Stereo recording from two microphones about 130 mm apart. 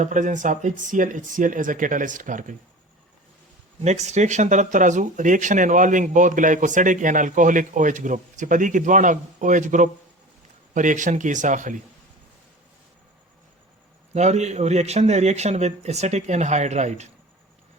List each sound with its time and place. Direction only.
0.0 s speech: 75° right (ahead or behind)
3.8 s speech: 60° right (ahead or behind); by 11.8 s 80° right
14.1 s a man's voice: 60° right (ahead or behind)